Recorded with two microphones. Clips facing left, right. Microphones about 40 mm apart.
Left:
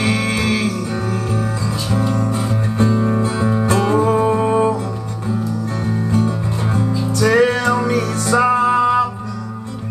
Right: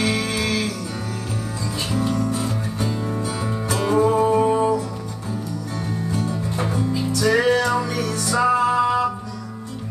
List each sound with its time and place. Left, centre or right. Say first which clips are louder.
0.0 s music: left 4 dB; left
2.0 s music: left 2 dB; left
3.7 s music: left 2 dB; centre
4.0 s music: left 2 dB; left
7.2 s music: left 4 dB; left
7.9 s music: left 6 dB; left
8.3 s music: left 4 dB; left